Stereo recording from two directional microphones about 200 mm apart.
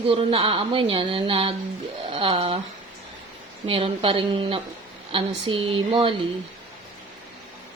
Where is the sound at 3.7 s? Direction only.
30° right (ahead or behind).